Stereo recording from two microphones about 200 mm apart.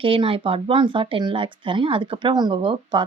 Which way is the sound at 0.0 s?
25° right (ahead or behind).